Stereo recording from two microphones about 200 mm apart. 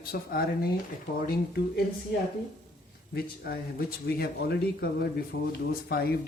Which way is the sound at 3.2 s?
50° left (ahead or behind).